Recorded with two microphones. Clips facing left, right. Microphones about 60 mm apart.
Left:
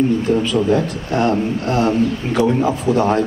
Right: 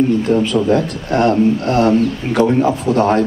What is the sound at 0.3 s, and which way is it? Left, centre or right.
A man's voice, right.